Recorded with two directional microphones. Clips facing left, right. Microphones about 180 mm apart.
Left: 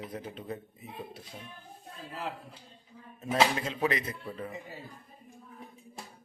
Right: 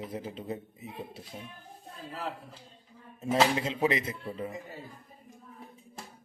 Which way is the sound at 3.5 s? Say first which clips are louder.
Right 2 dB; 25° right (ahead or behind).